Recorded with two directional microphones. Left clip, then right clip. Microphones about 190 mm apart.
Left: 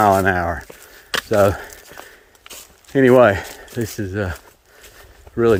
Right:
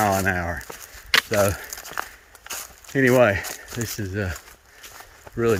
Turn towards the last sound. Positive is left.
turn(degrees=25)  # may be behind; listen again after turning